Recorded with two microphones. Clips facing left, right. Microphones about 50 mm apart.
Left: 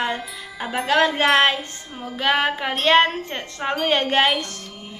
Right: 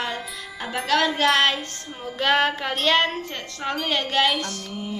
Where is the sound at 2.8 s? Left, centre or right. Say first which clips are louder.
Left 5 dB; centre.